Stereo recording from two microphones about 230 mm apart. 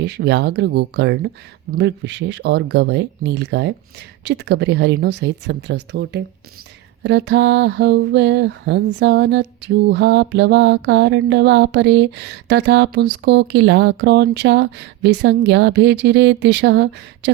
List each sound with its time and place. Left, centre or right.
0.0 s mantra: right